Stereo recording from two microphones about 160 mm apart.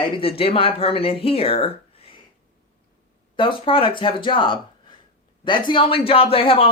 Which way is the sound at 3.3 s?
35° left (ahead or behind).